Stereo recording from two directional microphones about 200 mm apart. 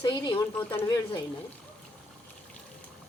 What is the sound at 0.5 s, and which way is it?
Speech, 10° left (ahead or behind).